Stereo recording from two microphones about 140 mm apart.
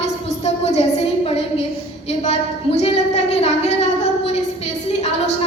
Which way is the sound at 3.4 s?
50° left (ahead or behind).